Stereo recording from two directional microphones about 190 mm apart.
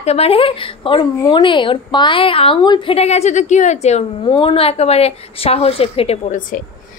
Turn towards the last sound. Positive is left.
turn(degrees=40)  # may be behind; listen again after turning